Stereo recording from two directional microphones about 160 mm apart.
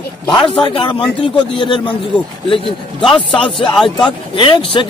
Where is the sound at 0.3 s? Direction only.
30° left (ahead or behind).